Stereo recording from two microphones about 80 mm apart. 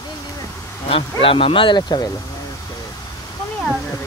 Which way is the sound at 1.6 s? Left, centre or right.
Left.